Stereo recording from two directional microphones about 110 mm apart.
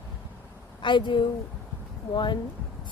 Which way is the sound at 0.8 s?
45° left (ahead or behind).